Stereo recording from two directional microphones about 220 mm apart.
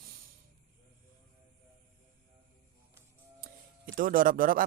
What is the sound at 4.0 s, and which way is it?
Speech, 40° right (ahead or behind).